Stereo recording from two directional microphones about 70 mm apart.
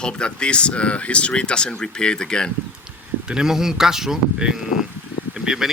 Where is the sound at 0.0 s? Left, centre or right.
Centre.